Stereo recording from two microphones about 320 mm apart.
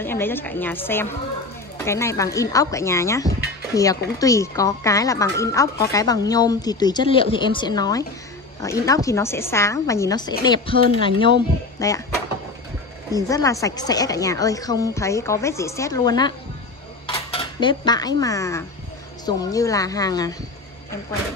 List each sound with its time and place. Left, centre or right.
0.0 s speech: centre
13.1 s speech: centre
17.0 s cutlery: centre
19.2 s speech: centre